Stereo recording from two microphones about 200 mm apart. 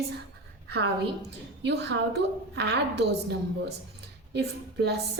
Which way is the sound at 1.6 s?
60° right (ahead or behind).